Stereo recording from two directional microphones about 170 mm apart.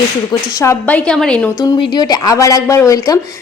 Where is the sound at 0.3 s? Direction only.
20° left (ahead or behind).